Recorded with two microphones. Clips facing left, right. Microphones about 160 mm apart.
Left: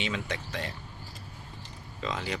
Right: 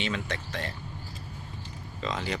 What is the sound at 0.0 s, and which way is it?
Speech, 10° left (ahead or behind).